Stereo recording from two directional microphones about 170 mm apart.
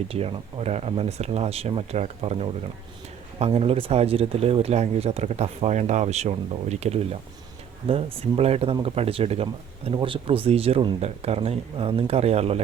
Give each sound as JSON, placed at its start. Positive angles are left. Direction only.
{"t": 0.1, "sound": "speech", "side_deg": -35}